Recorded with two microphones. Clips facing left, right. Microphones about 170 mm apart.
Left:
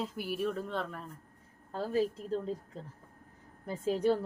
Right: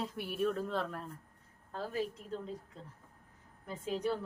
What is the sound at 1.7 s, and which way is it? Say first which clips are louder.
Speech: left 6 dB; 30° left (ahead or behind).